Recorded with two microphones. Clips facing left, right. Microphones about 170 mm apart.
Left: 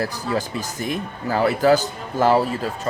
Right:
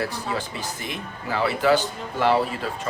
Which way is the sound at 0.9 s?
40° left (ahead or behind).